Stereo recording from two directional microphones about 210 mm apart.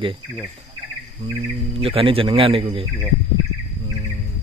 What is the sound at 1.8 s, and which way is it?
Cricket, 25° right (ahead or behind).